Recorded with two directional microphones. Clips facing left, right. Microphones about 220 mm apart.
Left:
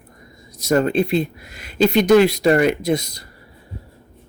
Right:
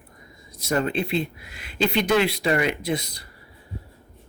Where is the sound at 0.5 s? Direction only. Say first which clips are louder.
Left 7 dB; 40° left (ahead or behind).